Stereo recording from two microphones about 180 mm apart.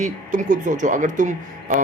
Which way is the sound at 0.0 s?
45° right (ahead or behind).